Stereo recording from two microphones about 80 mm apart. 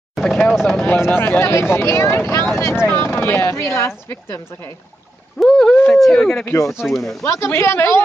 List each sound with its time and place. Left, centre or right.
0.1 s a sound: centre
0.5 s speech: centre
0.8 s speech: left
5.4 s a sound: centre
5.9 s speech: centre
6.4 s speech: left
6.8 s speech: centre
7.2 s speech: left